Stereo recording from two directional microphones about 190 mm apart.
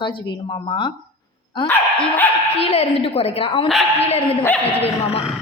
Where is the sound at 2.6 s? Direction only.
35° left (ahead or behind).